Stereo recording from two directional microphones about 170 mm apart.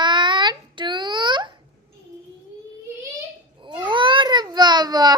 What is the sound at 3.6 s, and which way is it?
Baby cry, 30° right (ahead or behind).